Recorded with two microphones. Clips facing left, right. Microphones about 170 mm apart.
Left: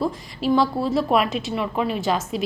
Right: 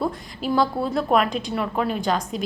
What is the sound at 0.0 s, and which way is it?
A woman's voice, centre (ahead or behind).